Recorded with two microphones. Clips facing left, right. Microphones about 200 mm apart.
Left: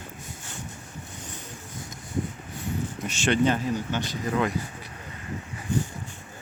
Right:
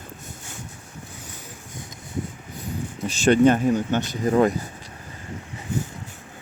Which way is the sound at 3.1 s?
45° right (ahead or behind).